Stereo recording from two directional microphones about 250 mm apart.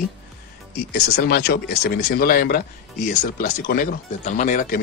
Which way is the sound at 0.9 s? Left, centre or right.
Left.